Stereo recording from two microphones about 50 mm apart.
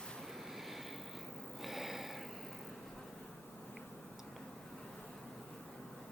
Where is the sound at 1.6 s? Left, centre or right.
Centre.